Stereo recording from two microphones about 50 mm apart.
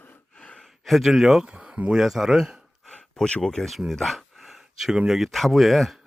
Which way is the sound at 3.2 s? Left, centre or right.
Centre.